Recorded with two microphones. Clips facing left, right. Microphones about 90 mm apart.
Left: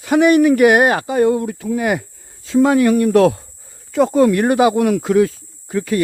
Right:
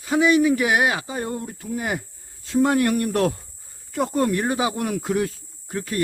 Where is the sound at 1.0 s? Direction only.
85° left.